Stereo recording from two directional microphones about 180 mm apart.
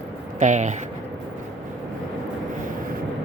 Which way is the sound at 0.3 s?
40° right (ahead or behind).